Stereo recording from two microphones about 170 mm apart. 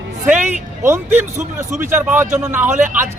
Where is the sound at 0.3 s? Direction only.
10° right (ahead or behind).